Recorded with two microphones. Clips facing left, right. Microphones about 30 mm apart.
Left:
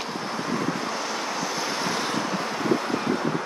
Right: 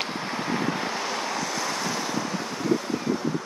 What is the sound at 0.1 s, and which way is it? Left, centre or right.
Vehicle, centre.